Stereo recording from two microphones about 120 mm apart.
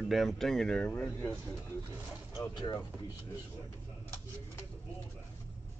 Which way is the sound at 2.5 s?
35° left (ahead or behind).